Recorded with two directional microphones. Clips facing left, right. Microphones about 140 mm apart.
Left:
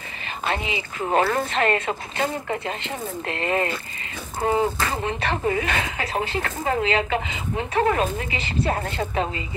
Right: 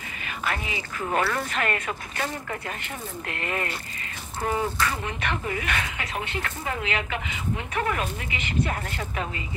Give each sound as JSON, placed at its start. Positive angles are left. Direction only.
{"t": 0.5, "sound": "speech", "side_deg": 25}